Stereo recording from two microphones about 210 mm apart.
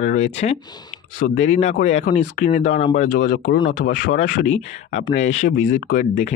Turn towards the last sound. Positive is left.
turn(degrees=40)  # may be behind; listen again after turning